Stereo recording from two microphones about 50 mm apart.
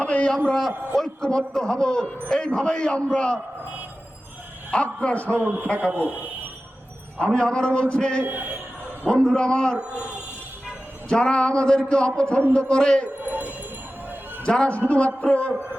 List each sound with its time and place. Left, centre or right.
0.0 s a man's voice: left
0.3 s a man's voice: centre
4.7 s a man's voice: centre
5.1 s a man's voice: left
5.9 s a man's voice: right
7.3 s a man's voice: centre
8.2 s a man's voice: right
9.3 s a man's voice: centre
11.1 s a man's voice: centre
13.2 s a sound: right
14.4 s a man's voice: centre